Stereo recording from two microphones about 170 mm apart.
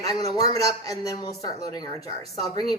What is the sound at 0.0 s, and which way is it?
A woman's voice, 20° left (ahead or behind).